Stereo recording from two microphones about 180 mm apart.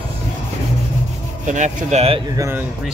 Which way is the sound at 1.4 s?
40° right (ahead or behind).